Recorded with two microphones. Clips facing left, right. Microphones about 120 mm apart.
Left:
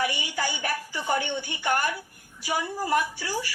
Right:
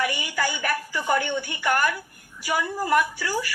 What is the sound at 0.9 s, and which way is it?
Speech, 45° right (ahead or behind).